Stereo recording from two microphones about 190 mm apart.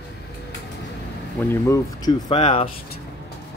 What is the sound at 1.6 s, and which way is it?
Speech, 15° left (ahead or behind).